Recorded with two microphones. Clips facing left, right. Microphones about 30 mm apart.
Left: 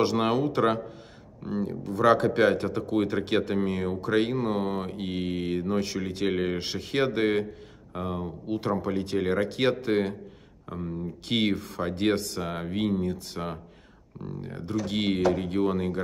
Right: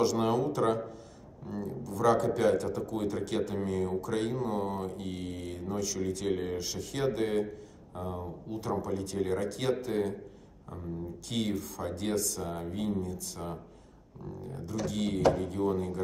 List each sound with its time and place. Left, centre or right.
0.0 s speech: left